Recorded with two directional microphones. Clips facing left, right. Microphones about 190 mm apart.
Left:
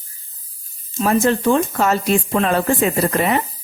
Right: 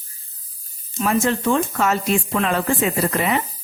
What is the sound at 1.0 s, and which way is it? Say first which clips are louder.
Speech: left 3 dB; 35° left (ahead or behind).